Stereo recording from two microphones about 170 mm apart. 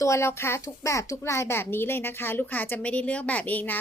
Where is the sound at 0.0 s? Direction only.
15° left (ahead or behind).